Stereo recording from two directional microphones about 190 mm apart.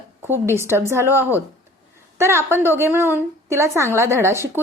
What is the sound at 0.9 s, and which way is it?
A woman's voice, 15° right (ahead or behind).